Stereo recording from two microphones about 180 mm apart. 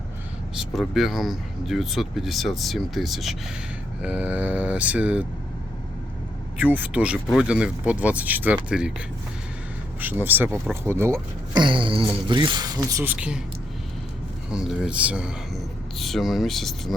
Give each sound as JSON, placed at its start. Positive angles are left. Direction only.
{"t": 0.5, "sound": "speech", "side_deg": 0}
{"t": 6.6, "sound": "speech", "side_deg": -10}
{"t": 10.0, "sound": "speech", "side_deg": -10}
{"t": 11.6, "sound": "speech", "side_deg": -30}
{"t": 14.5, "sound": "speech", "side_deg": -5}